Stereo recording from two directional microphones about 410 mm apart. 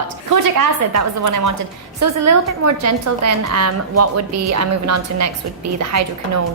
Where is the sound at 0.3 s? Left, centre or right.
Right.